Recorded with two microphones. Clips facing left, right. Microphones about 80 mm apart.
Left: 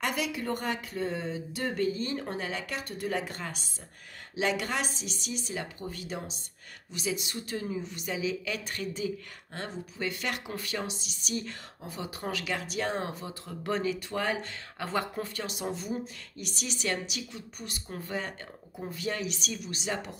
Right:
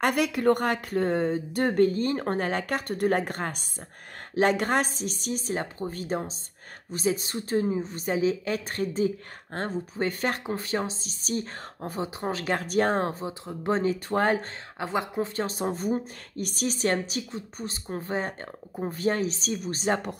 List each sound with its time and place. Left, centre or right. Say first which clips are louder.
0.0 s a woman's voice: right 9 dB; right
13.2 s speech: right 6 dB; right
13.8 s a woman's voice: right 6 dB; right
14.8 s speech: right 4 dB; centre
15.3 s a woman's voice: right 6 dB; right